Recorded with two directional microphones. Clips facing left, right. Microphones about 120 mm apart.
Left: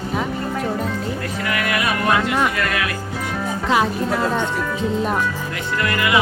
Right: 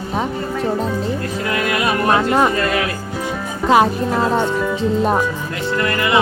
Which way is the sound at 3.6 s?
40° right (ahead or behind).